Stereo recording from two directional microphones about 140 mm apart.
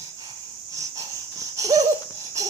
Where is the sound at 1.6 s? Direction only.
25° right (ahead or behind).